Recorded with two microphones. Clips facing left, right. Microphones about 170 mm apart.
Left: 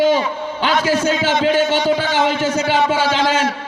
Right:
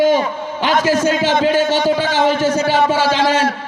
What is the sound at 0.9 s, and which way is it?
A man's voice, 45° right (ahead or behind).